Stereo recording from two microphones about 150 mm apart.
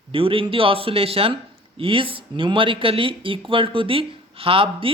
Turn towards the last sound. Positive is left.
turn(degrees=-40)  # may be behind; listen again after turning